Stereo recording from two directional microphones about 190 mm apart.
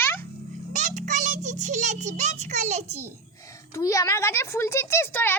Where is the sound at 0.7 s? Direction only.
40° right (ahead or behind).